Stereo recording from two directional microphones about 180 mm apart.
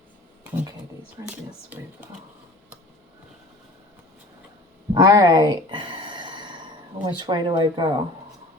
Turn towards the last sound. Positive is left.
turn(degrees=-25)  # may be behind; listen again after turning